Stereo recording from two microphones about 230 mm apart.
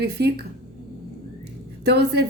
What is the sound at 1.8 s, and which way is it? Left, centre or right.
Speech, right.